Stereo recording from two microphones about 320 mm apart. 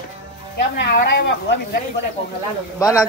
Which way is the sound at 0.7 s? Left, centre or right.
Left.